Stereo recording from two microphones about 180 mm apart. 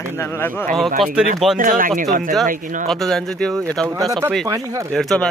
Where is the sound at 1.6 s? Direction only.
50° right (ahead or behind).